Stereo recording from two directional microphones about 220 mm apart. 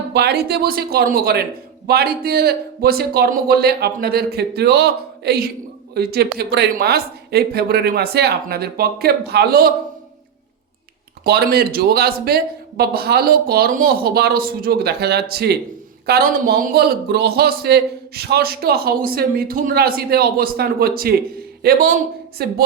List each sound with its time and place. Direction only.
0.1 s speech: 50° right (ahead or behind)
11.2 s speech: 45° right (ahead or behind)